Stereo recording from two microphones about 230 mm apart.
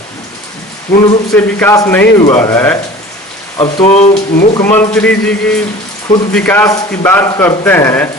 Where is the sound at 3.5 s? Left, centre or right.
Left.